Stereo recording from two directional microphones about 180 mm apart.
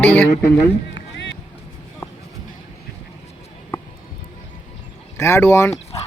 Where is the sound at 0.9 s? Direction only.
75° left (ahead or behind).